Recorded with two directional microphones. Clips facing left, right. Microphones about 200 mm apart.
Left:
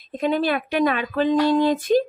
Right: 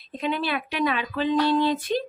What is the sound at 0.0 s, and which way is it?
Speech, 45° left (ahead or behind).